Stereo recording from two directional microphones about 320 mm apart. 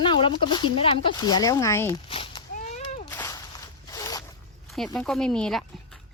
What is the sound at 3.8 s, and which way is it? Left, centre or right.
Zipper, centre.